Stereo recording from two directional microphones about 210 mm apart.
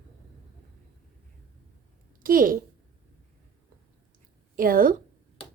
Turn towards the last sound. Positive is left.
turn(degrees=-40)  # may be behind; listen again after turning